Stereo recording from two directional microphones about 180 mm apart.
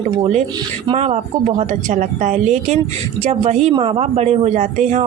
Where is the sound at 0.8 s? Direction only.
35° right (ahead or behind).